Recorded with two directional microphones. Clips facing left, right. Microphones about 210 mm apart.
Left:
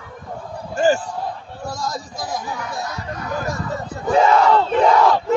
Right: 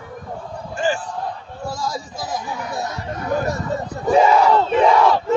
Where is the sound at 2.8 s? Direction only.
30° right (ahead or behind).